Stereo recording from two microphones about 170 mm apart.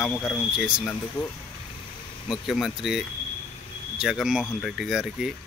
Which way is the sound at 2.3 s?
Centre (ahead or behind).